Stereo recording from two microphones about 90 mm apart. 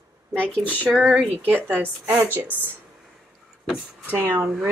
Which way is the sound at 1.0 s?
15° right (ahead or behind).